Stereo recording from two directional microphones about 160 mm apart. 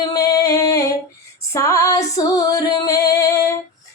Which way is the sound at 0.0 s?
20° left (ahead or behind).